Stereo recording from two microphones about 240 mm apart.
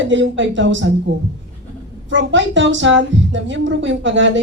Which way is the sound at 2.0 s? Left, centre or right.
Right.